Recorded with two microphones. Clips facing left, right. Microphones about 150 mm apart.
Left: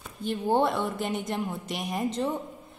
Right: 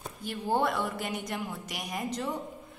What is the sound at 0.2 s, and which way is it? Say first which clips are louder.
A woman's voice: left 4 dB; 25° left (ahead or behind).